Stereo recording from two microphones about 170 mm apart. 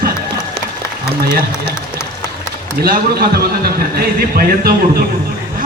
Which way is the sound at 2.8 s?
65° right (ahead or behind).